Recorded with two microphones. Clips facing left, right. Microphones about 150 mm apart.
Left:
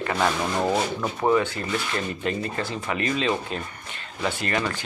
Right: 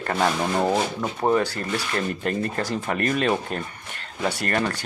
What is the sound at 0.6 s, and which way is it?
Speech, 15° right (ahead or behind).